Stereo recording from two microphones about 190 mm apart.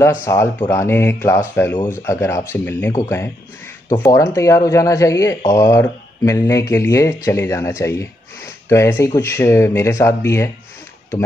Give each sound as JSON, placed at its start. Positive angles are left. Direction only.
{"t": 0.0, "sound": "speech", "side_deg": 15}